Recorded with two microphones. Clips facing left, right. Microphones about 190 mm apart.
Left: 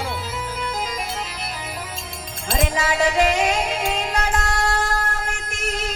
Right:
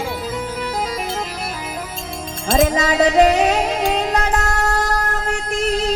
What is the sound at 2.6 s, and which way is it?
Music, 40° right (ahead or behind).